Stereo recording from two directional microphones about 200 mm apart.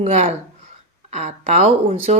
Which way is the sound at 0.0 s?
30° right (ahead or behind).